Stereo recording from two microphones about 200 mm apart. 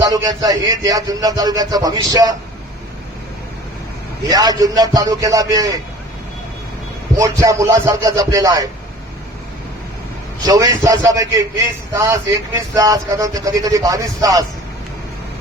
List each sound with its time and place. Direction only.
0.0 s a man's voice: 20° right (ahead or behind)
4.3 s a man's voice: 20° right (ahead or behind)
7.2 s speech: 15° right (ahead or behind)
10.4 s speech: 20° right (ahead or behind)
12.5 s speech: 15° right (ahead or behind)